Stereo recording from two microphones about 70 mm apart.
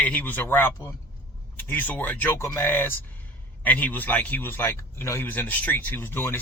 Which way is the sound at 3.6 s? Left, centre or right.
Left.